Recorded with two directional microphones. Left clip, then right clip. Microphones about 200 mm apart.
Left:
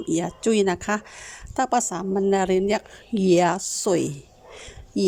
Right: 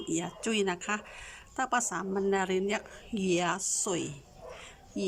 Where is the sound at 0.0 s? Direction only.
25° left (ahead or behind).